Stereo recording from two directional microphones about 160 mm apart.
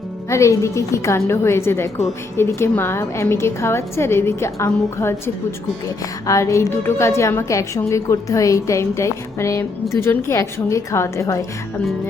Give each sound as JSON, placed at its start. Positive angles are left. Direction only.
{"t": 0.3, "sound": "a woman's voice", "side_deg": 20}